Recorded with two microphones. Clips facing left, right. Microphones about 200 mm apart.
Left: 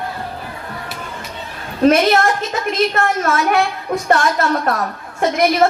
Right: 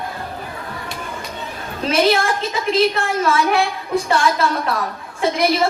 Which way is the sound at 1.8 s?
55° left (ahead or behind).